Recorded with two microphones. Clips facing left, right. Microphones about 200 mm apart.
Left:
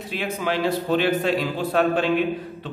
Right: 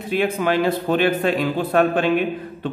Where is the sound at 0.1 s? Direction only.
55° right (ahead or behind).